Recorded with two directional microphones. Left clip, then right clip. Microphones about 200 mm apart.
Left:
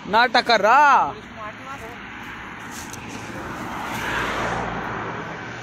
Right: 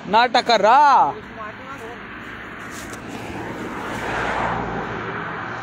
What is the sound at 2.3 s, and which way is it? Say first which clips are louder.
Vehicle: right 1 dB; 50° left (ahead or behind).